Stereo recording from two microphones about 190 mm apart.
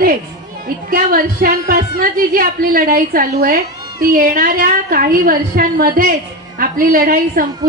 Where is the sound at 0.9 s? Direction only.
50° right (ahead or behind).